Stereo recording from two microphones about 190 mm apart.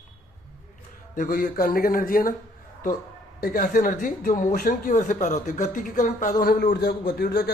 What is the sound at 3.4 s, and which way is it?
Speech, 50° left (ahead or behind).